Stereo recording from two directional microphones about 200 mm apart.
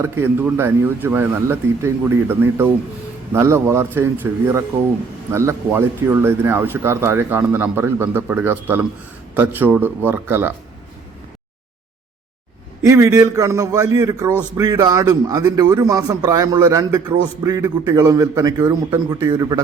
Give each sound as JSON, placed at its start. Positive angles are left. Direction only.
{"t": 0.0, "sound": "a man's voice", "side_deg": -10}
{"t": 12.8, "sound": "a man's voice", "side_deg": -15}